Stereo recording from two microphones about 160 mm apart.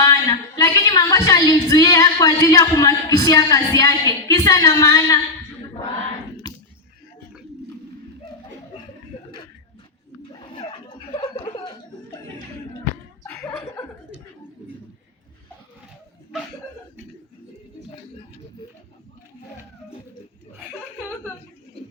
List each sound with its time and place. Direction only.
0.0 s a sound: 20° left (ahead or behind)
10.4 s chuckle: 35° left (ahead or behind)
13.2 s chuckle: 10° left (ahead or behind)